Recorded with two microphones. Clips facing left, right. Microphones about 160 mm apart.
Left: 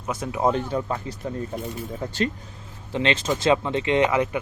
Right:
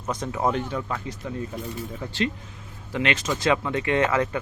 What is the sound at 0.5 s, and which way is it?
Speech, 30° left (ahead or behind).